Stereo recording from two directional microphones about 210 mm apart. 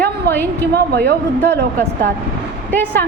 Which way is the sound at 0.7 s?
50° right (ahead or behind).